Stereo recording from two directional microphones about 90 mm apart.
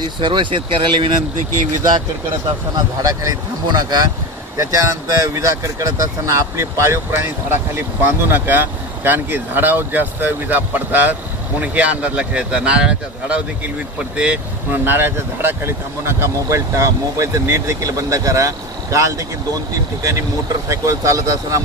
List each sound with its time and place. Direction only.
0.2 s speech: 65° right (ahead or behind)
3.0 s speech: 40° right (ahead or behind)
4.6 s a man's voice: 35° right (ahead or behind)